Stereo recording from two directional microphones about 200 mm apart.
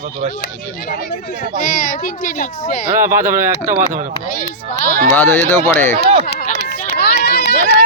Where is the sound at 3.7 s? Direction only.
40° right (ahead or behind).